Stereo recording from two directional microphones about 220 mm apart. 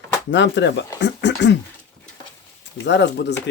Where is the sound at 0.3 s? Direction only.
55° left (ahead or behind).